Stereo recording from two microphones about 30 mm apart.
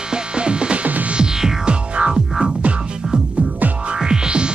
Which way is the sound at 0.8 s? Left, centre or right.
Right.